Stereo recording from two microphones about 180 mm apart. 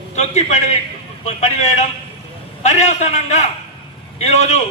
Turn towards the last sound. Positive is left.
turn(degrees=35)  # may be behind; listen again after turning